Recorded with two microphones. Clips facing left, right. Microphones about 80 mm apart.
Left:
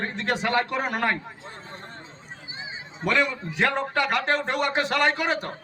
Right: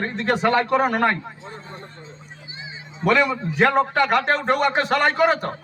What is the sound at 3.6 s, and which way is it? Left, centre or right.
Speech, right.